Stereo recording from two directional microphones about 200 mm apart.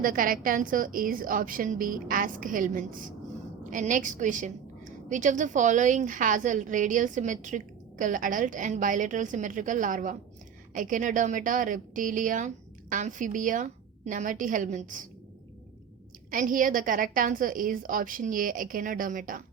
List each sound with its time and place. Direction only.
0.0 s a woman's voice: 45° right (ahead or behind)
16.3 s a woman's voice: 40° right (ahead or behind)